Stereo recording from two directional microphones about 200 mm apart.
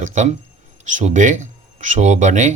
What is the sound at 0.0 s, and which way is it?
Speech, 40° right (ahead or behind).